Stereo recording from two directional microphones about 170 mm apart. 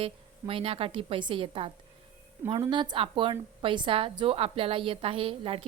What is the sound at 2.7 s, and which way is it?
A woman's voice, 25° right (ahead or behind).